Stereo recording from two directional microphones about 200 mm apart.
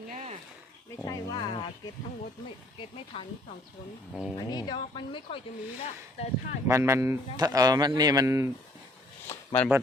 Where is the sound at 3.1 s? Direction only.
30° left (ahead or behind).